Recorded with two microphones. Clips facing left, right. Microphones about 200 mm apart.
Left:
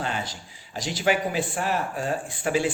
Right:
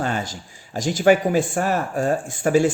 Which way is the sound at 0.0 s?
45° right (ahead or behind).